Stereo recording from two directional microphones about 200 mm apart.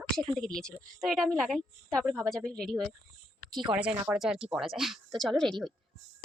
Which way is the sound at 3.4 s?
Centre (ahead or behind).